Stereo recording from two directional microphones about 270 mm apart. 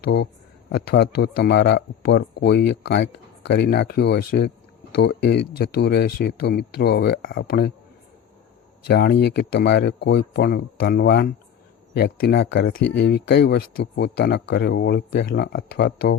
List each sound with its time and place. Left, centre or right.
0.0 s speech: left
8.9 s speech: left